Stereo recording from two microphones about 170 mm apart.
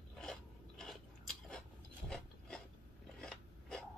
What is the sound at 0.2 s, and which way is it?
Crunch, centre (ahead or behind).